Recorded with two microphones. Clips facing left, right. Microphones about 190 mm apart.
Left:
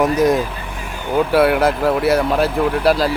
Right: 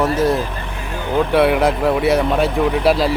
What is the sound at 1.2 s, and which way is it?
Speech, centre (ahead or behind).